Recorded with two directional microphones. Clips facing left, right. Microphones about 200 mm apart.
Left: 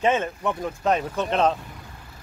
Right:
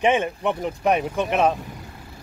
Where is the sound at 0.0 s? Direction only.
15° right (ahead or behind).